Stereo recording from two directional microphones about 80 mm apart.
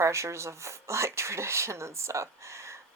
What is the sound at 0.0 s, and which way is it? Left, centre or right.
Speech, right.